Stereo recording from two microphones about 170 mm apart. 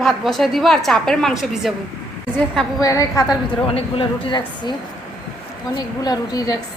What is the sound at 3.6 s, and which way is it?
Speech, 30° left (ahead or behind).